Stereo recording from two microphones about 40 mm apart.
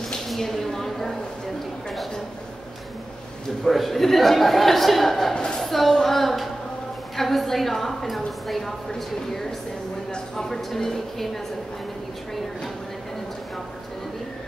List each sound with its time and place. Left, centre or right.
0.4 s a woman's voice: centre
3.6 s a man's voice: centre
5.3 s a woman's voice: left
5.6 s a man's voice: centre
10.1 s a woman's voice: centre